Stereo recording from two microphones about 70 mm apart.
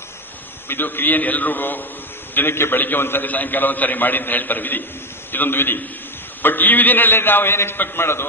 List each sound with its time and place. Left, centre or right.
0.7 s a man's voice: left